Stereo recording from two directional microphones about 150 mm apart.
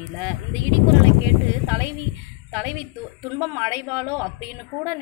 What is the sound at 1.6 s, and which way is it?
A woman's voice, 15° right (ahead or behind).